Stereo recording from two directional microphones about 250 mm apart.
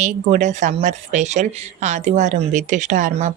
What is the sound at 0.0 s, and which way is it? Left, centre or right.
Speech, right.